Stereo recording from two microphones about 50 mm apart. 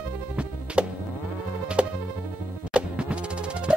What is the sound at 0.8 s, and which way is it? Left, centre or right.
Music, right.